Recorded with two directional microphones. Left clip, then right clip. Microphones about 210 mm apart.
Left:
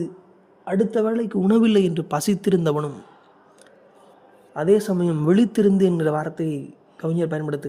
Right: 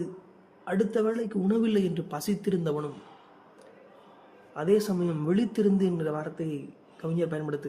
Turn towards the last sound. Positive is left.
turn(degrees=35)  # may be behind; listen again after turning